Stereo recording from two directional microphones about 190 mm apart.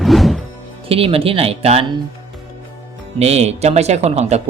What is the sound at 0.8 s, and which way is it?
Speech, 30° right (ahead or behind).